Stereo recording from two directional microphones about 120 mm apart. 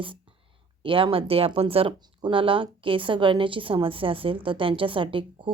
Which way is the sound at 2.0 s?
40° right (ahead or behind).